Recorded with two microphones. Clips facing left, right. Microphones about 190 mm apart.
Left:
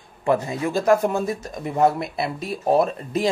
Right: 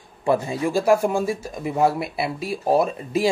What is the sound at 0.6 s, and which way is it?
Speech, 10° right (ahead or behind).